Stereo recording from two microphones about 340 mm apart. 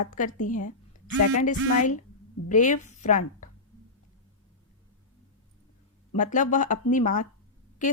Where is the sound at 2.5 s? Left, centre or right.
Left.